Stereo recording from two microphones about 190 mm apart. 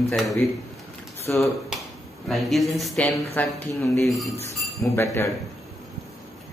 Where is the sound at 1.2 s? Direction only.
15° left (ahead or behind).